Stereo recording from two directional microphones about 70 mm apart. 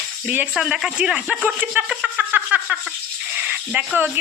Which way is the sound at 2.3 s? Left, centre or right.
Centre.